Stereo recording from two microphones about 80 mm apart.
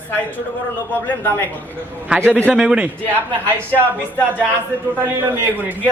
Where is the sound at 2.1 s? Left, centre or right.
Centre.